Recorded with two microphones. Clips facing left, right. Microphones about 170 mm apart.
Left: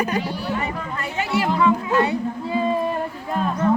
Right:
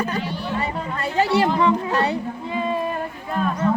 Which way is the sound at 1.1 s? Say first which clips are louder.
Right 3 dB; 35° right (ahead or behind).